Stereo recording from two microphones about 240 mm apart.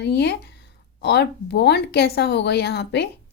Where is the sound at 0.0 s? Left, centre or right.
Left.